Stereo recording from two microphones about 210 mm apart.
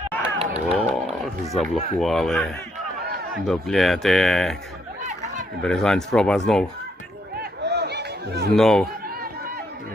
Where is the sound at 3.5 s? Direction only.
Centre (ahead or behind).